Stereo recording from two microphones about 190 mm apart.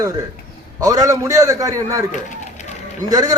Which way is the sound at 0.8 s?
20° right (ahead or behind).